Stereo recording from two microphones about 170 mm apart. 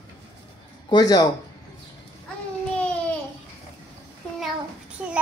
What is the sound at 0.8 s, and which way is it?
Speech, 25° left (ahead or behind).